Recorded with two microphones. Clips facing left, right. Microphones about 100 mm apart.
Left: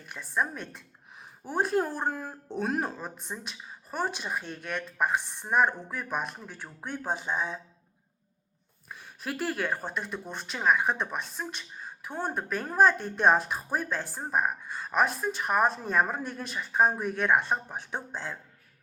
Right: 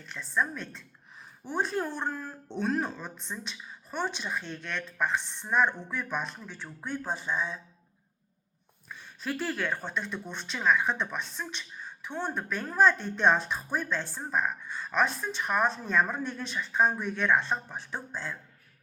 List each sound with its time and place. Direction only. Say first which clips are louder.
0.0 s a woman's voice: even; 15° left (ahead or behind)
8.9 s a woman's voice: right 1 dB; 10° left (ahead or behind)